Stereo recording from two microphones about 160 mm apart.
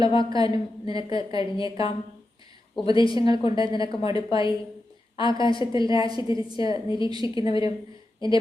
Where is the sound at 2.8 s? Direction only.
30° left (ahead or behind).